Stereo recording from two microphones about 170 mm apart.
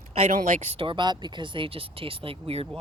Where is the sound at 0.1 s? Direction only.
40° right (ahead or behind).